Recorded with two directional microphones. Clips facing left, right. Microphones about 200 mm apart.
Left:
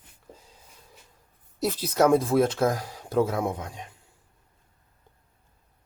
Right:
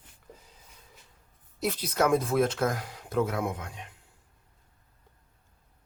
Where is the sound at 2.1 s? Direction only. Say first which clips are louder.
Left 4 dB; 30° left (ahead or behind).